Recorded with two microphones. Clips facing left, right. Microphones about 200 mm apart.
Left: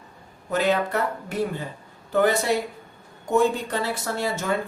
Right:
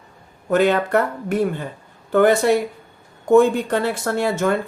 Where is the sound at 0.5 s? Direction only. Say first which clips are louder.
Right 6 dB; 55° right (ahead or behind).